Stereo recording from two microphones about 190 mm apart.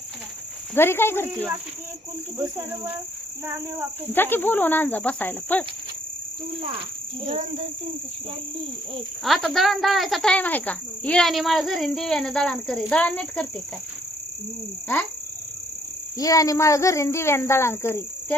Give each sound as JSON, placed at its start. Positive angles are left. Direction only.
{"t": 0.7, "sound": "speech", "side_deg": 10}
{"t": 2.4, "sound": "speech", "side_deg": -10}
{"t": 4.1, "sound": "speech", "side_deg": 10}
{"t": 7.3, "sound": "cricket", "side_deg": -35}
{"t": 9.2, "sound": "speech", "side_deg": 0}
{"t": 16.1, "sound": "speech", "side_deg": 20}